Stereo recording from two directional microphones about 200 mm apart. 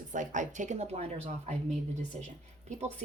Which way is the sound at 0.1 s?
40° right (ahead or behind).